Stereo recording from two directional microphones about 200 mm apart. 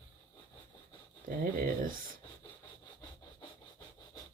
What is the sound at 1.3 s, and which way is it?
Speech, 45° right (ahead or behind).